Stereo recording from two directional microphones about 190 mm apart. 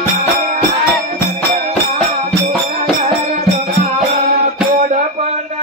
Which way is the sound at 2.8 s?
40° right (ahead or behind).